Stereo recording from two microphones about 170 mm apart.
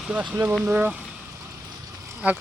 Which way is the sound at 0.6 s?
10° right (ahead or behind).